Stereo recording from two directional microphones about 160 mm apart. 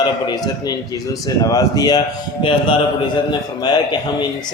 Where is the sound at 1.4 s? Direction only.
25° left (ahead or behind).